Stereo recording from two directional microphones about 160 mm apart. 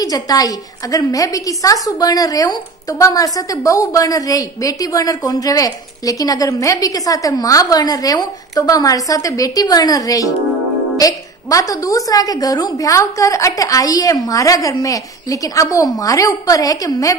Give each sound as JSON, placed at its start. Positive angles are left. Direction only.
{"t": 0.0, "sound": "a woman's voice", "side_deg": 25}